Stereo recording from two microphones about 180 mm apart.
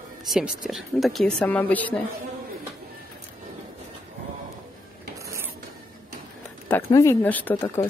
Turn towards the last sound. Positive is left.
turn(degrees=15)  # may be behind; listen again after turning